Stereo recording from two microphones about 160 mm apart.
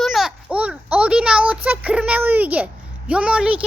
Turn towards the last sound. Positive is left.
turn(degrees=-5)  # may be behind; listen again after turning